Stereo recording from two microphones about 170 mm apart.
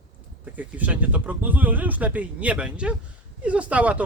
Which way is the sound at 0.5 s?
10° right (ahead or behind).